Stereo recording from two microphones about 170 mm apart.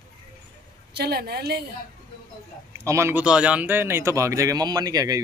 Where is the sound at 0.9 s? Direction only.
70° right (ahead or behind).